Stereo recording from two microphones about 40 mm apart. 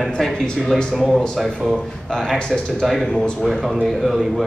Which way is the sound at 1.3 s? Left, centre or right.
Centre.